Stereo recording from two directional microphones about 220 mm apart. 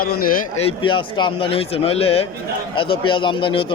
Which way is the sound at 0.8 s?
20° left (ahead or behind).